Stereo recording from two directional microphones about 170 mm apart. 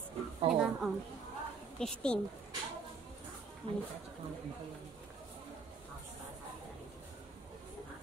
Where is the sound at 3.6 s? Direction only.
35° right (ahead or behind).